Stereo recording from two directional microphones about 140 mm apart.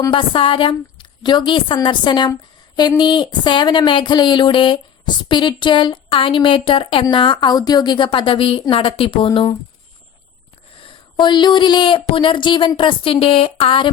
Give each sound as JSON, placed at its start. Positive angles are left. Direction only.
{"t": 0.1, "sound": "a woman's voice", "side_deg": 40}
{"t": 10.8, "sound": "speech", "side_deg": 40}